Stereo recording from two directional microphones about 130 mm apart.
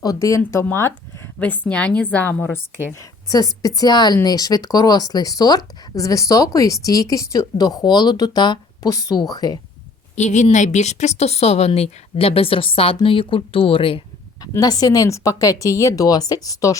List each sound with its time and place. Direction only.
0.0 s speech: 25° left (ahead or behind)
10.2 s a woman's voice: 65° left (ahead or behind); by 14.0 s 45° left (ahead or behind)
14.4 s speech: 30° left (ahead or behind)